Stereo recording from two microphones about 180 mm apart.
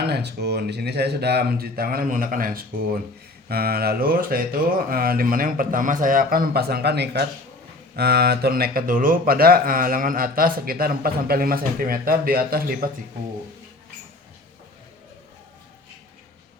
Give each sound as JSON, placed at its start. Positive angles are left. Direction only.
{"t": 0.1, "sound": "speech", "side_deg": -65}